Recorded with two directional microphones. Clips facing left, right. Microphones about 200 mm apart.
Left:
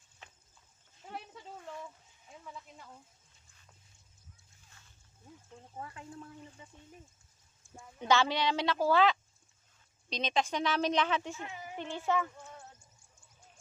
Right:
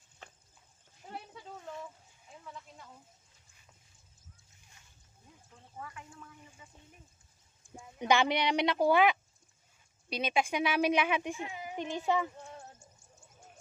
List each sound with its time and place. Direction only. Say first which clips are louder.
5.8 s speech: left 2 dB; 30° left (ahead or behind)
7.7 s speech: right 1 dB; 15° right (ahead or behind)